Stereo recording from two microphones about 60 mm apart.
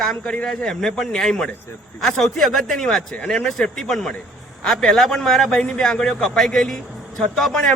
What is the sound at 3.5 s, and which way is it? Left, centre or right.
A man's voice, centre.